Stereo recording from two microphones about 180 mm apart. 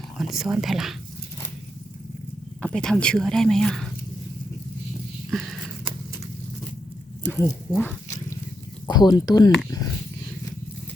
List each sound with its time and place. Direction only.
0.2 s speech: centre (ahead or behind)
2.6 s speech: 5° left (ahead or behind)
5.3 s a sound: centre (ahead or behind)
7.3 s speech: 15° left (ahead or behind)
8.9 s speech: 25° left (ahead or behind)